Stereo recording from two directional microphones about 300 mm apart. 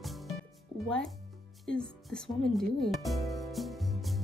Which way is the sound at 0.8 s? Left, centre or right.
Centre.